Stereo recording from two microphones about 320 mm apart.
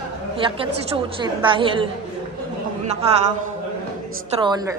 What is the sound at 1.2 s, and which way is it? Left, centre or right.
Speech, centre.